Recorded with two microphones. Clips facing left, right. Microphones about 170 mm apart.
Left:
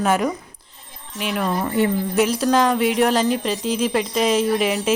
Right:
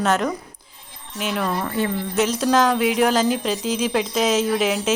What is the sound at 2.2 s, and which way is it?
Speech, centre (ahead or behind).